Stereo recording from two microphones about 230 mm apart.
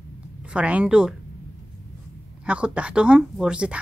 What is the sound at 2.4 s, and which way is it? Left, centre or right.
Speech, centre.